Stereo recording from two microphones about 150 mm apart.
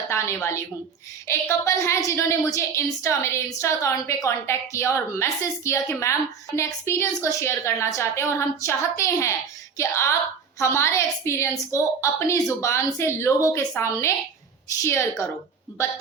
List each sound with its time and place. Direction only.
0.1 s a woman's voice: 20° left (ahead or behind)